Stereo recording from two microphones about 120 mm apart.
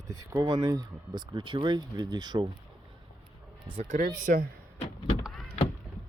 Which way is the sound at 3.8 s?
90° right.